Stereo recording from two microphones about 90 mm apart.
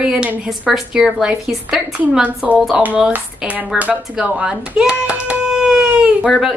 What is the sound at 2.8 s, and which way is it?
Speech, 15° right (ahead or behind).